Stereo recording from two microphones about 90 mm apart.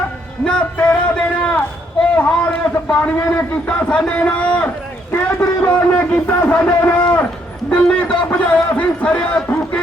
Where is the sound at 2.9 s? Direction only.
15° left (ahead or behind).